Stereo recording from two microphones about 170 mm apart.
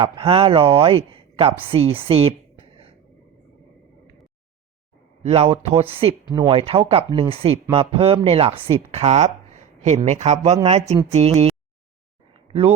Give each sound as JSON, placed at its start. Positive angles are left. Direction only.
{"t": 0.0, "sound": "speech", "side_deg": -35}
{"t": 5.2, "sound": "speech", "side_deg": -35}